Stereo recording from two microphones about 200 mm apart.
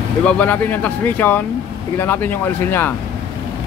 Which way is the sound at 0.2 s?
5° left (ahead or behind).